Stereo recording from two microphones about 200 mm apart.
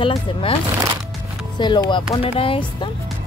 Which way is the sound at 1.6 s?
25° left (ahead or behind).